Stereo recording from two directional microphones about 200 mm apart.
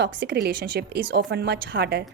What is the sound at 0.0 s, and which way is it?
A woman's voice, 50° right (ahead or behind).